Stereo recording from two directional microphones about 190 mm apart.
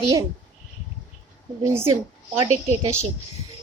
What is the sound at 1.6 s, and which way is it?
A woman's voice, 15° right (ahead or behind).